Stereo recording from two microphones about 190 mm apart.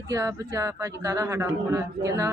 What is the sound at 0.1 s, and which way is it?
Speech, 20° right (ahead or behind).